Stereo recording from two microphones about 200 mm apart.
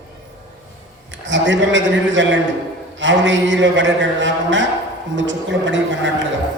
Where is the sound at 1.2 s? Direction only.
65° right (ahead or behind).